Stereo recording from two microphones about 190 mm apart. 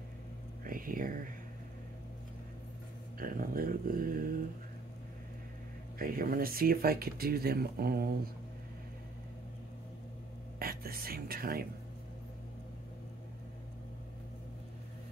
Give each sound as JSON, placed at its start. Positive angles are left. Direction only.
{"t": 0.7, "sound": "speech", "side_deg": -45}
{"t": 3.2, "sound": "speech", "side_deg": -50}
{"t": 5.9, "sound": "speech", "side_deg": -50}
{"t": 10.6, "sound": "whispering", "side_deg": -50}